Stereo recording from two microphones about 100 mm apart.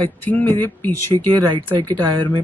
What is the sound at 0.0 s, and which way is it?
Speech, 15° left (ahead or behind).